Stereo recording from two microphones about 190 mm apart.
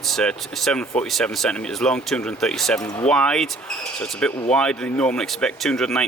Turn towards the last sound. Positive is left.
turn(degrees=0)  # may be behind; listen again after turning